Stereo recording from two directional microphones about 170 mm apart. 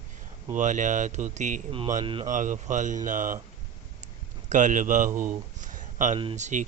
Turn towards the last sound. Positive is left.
turn(degrees=-45)  # may be behind; listen again after turning